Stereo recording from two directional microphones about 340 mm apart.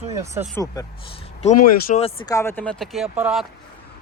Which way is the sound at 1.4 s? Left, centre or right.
Left.